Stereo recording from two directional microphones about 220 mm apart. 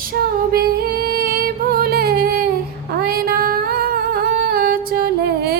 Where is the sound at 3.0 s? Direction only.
45° right (ahead or behind).